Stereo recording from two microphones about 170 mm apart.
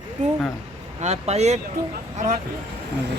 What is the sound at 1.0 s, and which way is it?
Speech, 40° right (ahead or behind).